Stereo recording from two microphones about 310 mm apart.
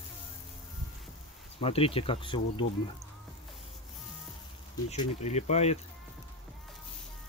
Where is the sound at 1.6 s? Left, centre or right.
Centre.